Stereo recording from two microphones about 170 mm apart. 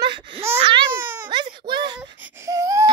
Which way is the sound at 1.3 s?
25° right (ahead or behind).